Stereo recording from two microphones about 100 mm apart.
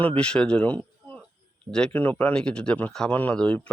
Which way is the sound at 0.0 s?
15° left (ahead or behind).